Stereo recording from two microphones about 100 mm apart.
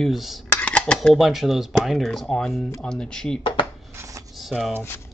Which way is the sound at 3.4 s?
50° left (ahead or behind).